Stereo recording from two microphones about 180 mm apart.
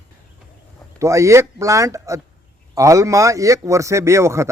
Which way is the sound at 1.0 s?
15° right (ahead or behind).